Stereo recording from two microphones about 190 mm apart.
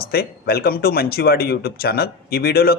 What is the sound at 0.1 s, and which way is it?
Speech, 55° left (ahead or behind).